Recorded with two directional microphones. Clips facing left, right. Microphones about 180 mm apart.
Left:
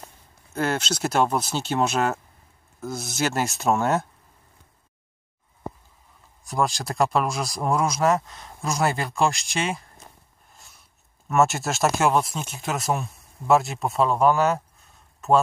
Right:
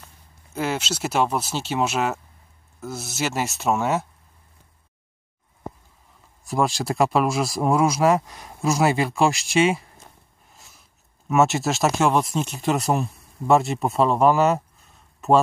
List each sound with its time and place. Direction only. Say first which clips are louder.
0.6 s speech: left 1 dB; 5° right (ahead or behind)
6.4 s speech: right 2 dB; centre (ahead or behind)
10.5 s a sound: right 1 dB; 5° right (ahead or behind)
11.2 s speech: right 2 dB; centre (ahead or behind)